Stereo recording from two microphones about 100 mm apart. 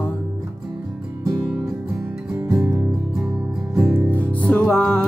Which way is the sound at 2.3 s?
25° right (ahead or behind).